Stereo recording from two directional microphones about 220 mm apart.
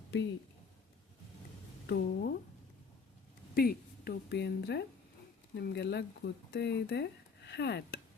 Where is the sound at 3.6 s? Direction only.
45° left (ahead or behind).